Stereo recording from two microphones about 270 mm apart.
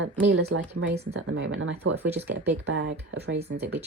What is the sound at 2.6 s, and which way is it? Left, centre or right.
Speech, right.